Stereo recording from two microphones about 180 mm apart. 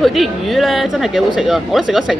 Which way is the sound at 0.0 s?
Centre (ahead or behind).